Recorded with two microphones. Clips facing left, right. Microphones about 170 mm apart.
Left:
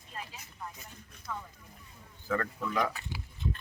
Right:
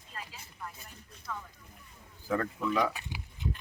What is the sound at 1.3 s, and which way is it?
Speech, 15° left (ahead or behind).